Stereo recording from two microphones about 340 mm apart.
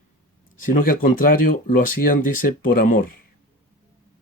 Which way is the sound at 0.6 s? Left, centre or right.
Left.